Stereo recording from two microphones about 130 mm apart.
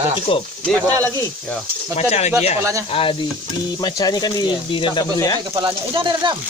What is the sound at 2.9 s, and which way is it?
Sizzle, 45° left (ahead or behind).